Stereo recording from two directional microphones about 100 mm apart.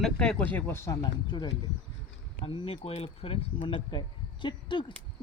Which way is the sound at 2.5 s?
70° left (ahead or behind).